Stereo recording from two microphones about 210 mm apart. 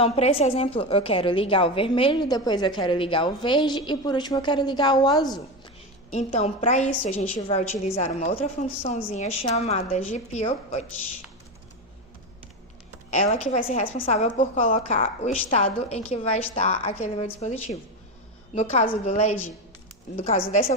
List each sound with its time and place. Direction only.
0.0 s a woman's voice: 30° left (ahead or behind)
6.1 s a woman's voice: 30° left (ahead or behind)
13.1 s a woman's voice: 35° left (ahead or behind)